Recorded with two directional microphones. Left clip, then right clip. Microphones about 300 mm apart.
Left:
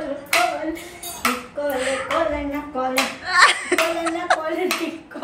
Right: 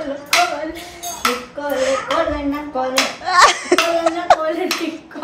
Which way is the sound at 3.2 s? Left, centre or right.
Centre.